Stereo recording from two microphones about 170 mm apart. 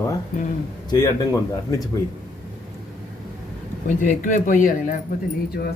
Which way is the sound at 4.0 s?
50° left (ahead or behind).